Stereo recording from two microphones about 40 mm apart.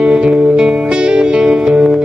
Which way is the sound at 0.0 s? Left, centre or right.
Right.